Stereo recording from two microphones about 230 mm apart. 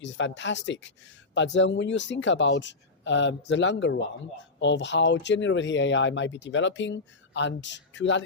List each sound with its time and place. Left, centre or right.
0.0 s speech: left